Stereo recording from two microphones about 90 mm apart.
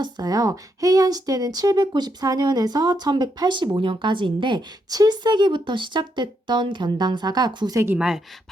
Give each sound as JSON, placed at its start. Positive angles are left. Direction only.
{"t": 0.0, "sound": "speech", "side_deg": -45}
{"t": 3.8, "sound": "speech", "side_deg": -70}
{"t": 4.9, "sound": "speech", "side_deg": -50}
{"t": 7.9, "sound": "a woman's voice", "side_deg": -5}